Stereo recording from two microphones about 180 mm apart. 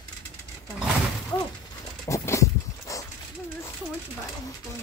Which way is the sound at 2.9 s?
15° left (ahead or behind).